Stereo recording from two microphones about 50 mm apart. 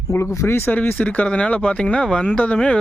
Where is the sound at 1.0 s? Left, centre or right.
Left.